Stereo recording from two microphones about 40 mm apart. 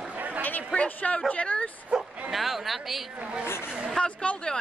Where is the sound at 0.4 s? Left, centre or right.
Left.